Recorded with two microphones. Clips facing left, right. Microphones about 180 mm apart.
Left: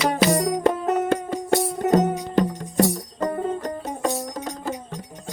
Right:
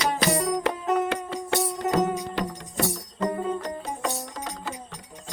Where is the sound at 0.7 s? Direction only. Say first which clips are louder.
Left 3 dB; 55° left (ahead or behind).